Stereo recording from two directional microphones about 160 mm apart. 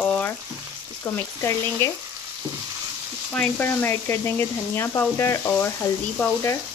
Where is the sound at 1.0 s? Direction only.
15° left (ahead or behind).